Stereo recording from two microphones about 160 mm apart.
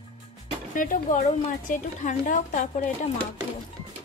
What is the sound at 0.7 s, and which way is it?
A woman's voice, 55° left (ahead or behind).